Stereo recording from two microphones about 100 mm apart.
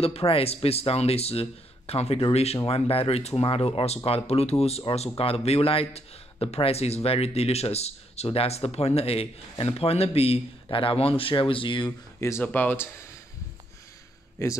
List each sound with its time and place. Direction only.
0.0 s speech: 75° left (ahead or behind); by 11.9 s 55° left (ahead or behind)
12.2 s speech: 30° left (ahead or behind)
12.4 s speech: 20° left (ahead or behind)
14.4 s speech: 30° left (ahead or behind)